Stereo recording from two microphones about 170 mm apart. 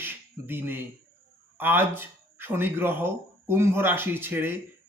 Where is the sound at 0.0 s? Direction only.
10° right (ahead or behind).